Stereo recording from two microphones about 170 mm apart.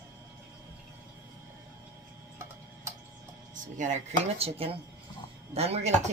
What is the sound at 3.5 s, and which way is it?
Speech, 45° right (ahead or behind).